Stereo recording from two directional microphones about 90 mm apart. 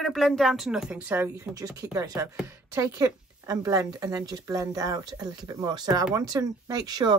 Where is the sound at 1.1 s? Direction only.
30° right (ahead or behind).